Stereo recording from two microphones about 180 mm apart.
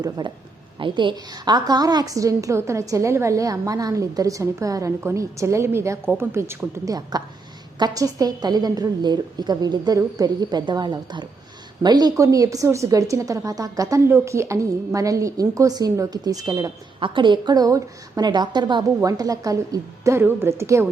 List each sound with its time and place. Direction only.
0.0 s a woman's voice: 25° right (ahead or behind)